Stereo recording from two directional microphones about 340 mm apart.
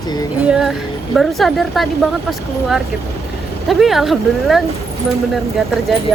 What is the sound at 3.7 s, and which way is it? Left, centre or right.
Speech, centre.